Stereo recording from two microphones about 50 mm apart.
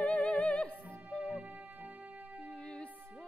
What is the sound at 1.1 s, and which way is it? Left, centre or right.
Music, right.